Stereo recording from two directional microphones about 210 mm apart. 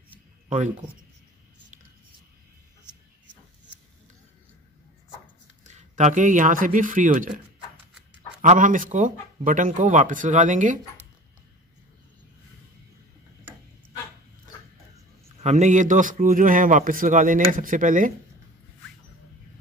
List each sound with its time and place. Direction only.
0.5 s a man's voice: 35° right (ahead or behind)
5.6 s a man's voice: 35° right (ahead or behind)
15.2 s a man's voice: 30° right (ahead or behind)